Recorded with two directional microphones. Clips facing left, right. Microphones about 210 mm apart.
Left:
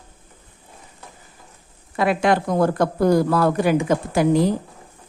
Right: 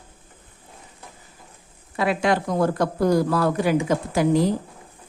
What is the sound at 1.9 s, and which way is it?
Speech, 55° left (ahead or behind).